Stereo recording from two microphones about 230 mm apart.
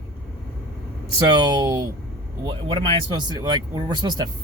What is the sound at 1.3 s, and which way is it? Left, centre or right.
Speech, centre.